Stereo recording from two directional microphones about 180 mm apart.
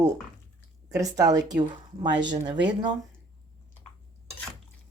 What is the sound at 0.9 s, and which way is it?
Speech, 20° right (ahead or behind).